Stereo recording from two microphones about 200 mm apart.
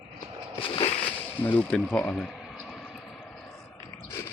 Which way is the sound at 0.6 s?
30° left (ahead or behind).